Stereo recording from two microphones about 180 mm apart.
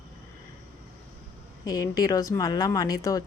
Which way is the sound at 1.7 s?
20° left (ahead or behind).